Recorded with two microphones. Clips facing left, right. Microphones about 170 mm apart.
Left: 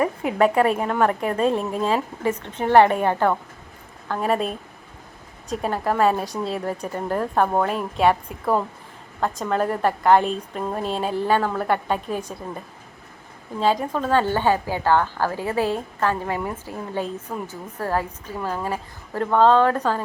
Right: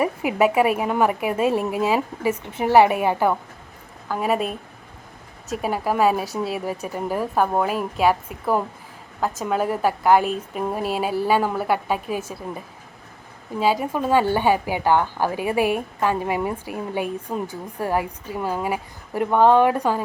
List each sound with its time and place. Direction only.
0.0 s a woman's voice: 10° right (ahead or behind)